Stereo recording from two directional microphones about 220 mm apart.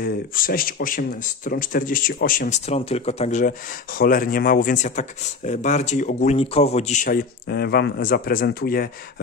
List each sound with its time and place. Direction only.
0.0 s speech: 40° left (ahead or behind)